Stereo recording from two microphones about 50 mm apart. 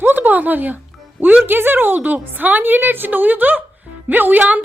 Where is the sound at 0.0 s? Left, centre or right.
Right.